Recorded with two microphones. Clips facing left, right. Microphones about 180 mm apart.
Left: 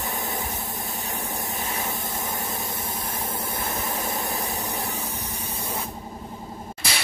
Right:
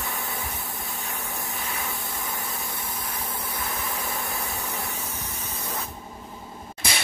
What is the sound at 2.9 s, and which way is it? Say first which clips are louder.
Spray: left 3 dB; 25° left (ahead or behind).